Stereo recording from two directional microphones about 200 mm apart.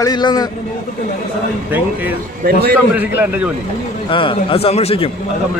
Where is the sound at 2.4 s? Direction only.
50° right (ahead or behind).